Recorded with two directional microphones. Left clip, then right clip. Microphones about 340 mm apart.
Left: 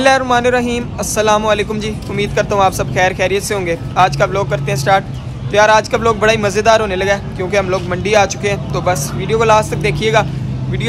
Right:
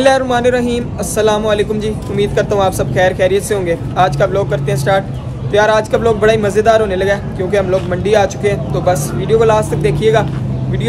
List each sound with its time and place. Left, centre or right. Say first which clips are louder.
0.0 s a man's voice: even; centre